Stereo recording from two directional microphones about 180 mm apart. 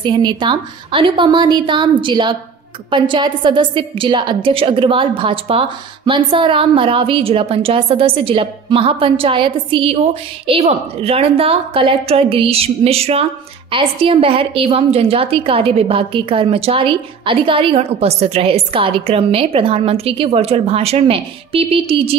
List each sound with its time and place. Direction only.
0.0 s a woman's voice: 25° right (ahead or behind)